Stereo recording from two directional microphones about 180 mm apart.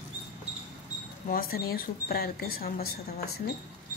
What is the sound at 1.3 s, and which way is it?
Speech, 55° left (ahead or behind).